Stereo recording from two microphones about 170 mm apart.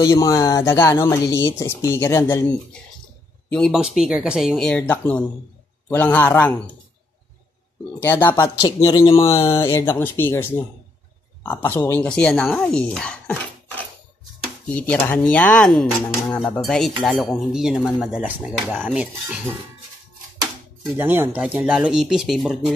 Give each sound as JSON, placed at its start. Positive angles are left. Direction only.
{"t": 0.0, "sound": "speech", "side_deg": 20}
{"t": 8.0, "sound": "speech", "side_deg": 15}
{"t": 11.6, "sound": "speech", "side_deg": 15}
{"t": 14.7, "sound": "speech", "side_deg": 10}
{"t": 20.9, "sound": "speech", "side_deg": -10}